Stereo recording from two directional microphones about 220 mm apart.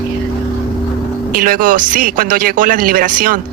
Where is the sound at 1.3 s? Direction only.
40° right (ahead or behind).